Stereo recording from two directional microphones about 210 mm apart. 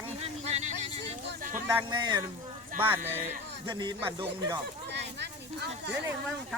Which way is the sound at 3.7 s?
20° right (ahead or behind).